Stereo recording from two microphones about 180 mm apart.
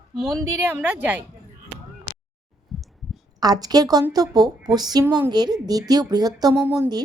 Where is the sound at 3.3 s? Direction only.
20° right (ahead or behind).